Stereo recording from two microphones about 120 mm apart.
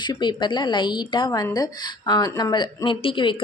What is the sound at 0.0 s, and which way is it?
Speech, 40° left (ahead or behind).